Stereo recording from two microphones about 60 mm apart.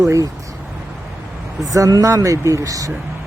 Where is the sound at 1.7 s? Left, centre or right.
Right.